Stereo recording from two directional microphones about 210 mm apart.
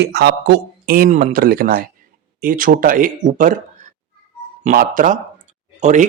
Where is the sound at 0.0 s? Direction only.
55° right (ahead or behind).